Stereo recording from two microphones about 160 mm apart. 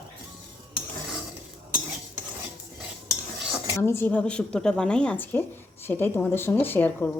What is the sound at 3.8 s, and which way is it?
A woman's voice, 15° left (ahead or behind).